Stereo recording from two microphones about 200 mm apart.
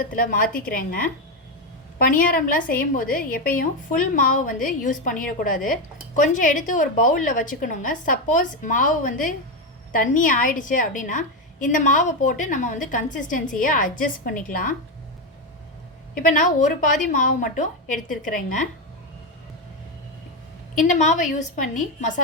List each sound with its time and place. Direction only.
0.0 s a woman's voice: 45° left (ahead or behind)
16.1 s a woman's voice: 40° left (ahead or behind)
20.7 s a woman's voice: 40° left (ahead or behind)